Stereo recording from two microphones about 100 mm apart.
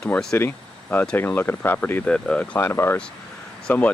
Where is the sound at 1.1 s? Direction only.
20° left (ahead or behind).